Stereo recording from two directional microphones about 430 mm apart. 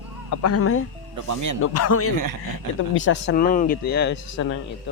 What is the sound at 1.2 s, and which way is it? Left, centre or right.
Speech, right.